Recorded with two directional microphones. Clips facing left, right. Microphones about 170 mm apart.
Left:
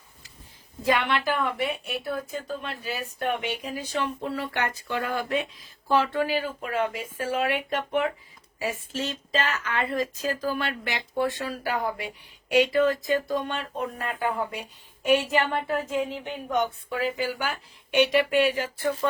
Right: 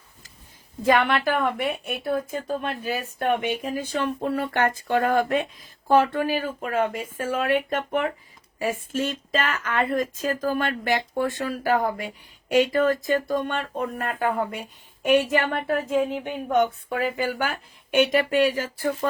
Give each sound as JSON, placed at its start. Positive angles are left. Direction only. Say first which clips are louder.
{"t": 0.9, "sound": "a woman's voice", "louder": "right 4 dB", "side_deg": -50}